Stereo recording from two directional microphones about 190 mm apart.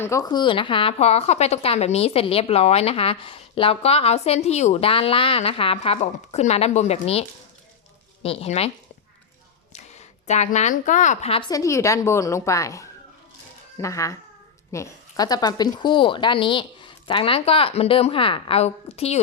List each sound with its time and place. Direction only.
0.0 s a woman's voice: 15° left (ahead or behind); by 8.7 s 35° left (ahead or behind)
9.7 s speech: 35° left (ahead or behind)